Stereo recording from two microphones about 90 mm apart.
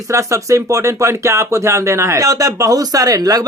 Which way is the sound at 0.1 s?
35° right (ahead or behind).